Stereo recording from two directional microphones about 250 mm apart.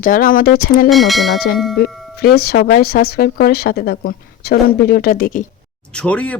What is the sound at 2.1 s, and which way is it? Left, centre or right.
Speech, left.